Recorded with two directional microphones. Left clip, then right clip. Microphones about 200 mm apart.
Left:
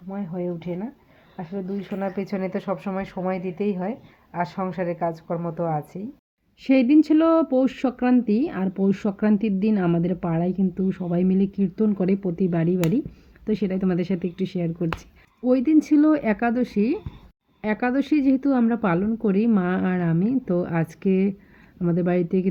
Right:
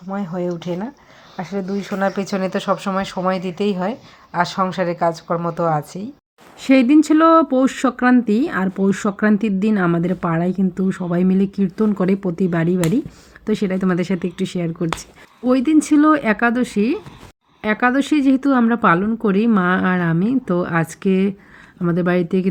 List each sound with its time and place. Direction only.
0.1 s a woman's voice: 15° right (ahead or behind)
6.6 s speech: 25° right (ahead or behind)